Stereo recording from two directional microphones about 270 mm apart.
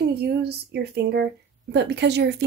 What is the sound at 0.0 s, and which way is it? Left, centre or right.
A woman's voice, right.